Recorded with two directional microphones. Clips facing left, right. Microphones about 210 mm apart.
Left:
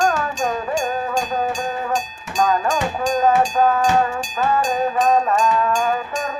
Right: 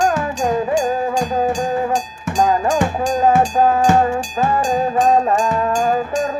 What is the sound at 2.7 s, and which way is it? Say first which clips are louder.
Music: right 3 dB; 55° right (ahead or behind).